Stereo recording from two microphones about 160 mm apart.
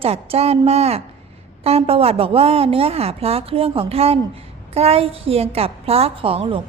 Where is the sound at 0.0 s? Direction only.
40° right (ahead or behind).